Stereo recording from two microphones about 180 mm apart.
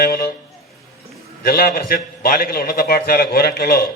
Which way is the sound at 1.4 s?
55° left (ahead or behind).